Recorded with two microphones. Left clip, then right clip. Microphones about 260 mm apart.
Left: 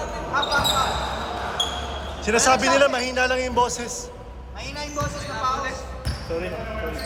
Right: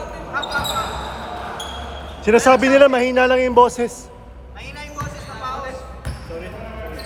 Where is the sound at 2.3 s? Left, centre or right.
Right.